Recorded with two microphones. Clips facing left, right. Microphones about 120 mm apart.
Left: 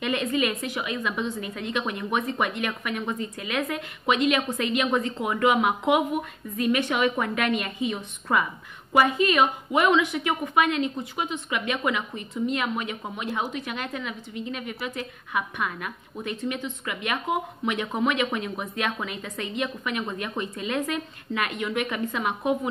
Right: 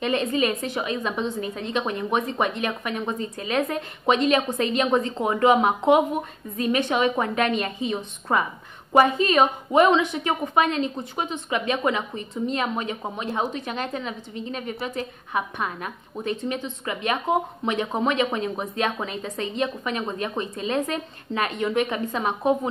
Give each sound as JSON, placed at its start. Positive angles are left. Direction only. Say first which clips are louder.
{"t": 0.0, "sound": "a woman's voice", "louder": "right 2 dB", "side_deg": -30}